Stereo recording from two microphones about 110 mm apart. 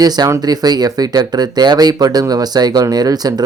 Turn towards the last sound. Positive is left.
turn(degrees=-35)  # may be behind; listen again after turning